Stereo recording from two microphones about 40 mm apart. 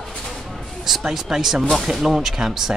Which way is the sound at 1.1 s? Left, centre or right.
Centre.